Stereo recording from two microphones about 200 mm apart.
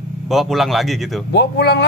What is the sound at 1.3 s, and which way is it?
Speech, 55° left (ahead or behind).